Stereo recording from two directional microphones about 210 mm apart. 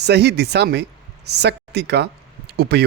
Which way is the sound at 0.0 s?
50° right (ahead or behind).